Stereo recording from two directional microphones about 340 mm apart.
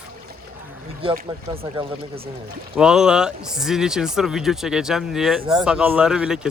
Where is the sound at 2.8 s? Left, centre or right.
Centre.